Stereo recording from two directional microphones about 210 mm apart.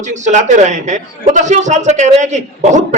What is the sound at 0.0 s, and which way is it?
A man's voice, 35° right (ahead or behind).